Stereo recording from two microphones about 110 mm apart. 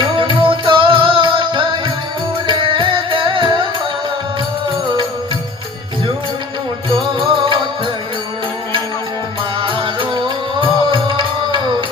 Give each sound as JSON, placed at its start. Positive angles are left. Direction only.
{"t": 0.2, "sound": "music", "side_deg": -50}
{"t": 6.9, "sound": "music", "side_deg": -50}
{"t": 9.6, "sound": "music", "side_deg": -50}